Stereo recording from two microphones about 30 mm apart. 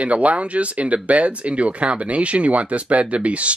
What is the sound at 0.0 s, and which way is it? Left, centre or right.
Speech, right.